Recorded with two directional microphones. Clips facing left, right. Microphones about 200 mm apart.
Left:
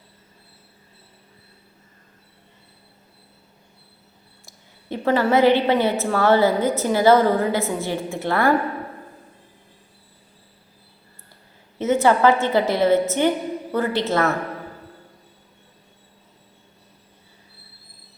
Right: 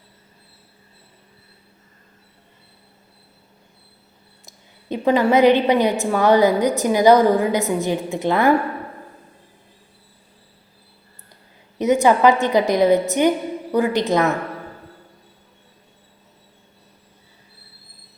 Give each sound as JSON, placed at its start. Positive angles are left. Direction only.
{"t": 4.4, "sound": "a woman's voice", "side_deg": -15}
{"t": 11.8, "sound": "a woman's voice", "side_deg": -15}